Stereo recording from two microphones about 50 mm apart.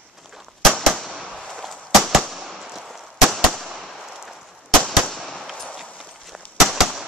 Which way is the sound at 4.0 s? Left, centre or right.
Centre.